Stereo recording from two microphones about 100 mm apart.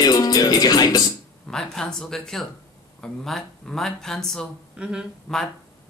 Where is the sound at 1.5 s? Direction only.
5° left (ahead or behind).